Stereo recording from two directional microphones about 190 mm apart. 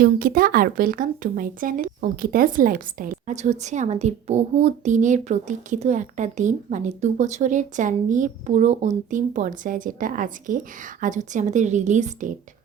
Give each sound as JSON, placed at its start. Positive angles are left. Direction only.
{"t": 0.0, "sound": "speech", "side_deg": -50}